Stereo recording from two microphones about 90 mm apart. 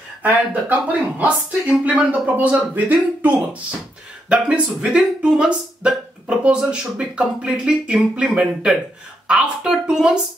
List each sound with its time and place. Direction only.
0.2 s speech: 20° right (ahead or behind)